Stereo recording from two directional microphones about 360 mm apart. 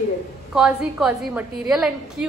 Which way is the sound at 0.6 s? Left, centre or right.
Centre.